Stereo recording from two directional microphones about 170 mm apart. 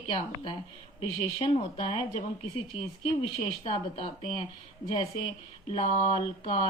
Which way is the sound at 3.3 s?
35° left (ahead or behind).